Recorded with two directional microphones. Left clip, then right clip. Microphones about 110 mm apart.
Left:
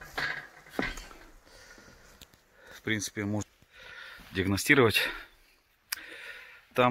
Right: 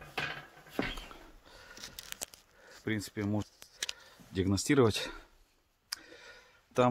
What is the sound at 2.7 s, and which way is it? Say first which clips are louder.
Speech: left 5 dB; centre (ahead or behind).